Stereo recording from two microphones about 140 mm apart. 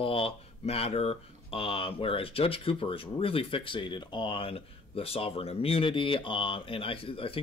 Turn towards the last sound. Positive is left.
turn(degrees=40)  # may be behind; listen again after turning